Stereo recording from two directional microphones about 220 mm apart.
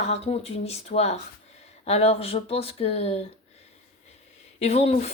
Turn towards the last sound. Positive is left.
turn(degrees=30)  # may be behind; listen again after turning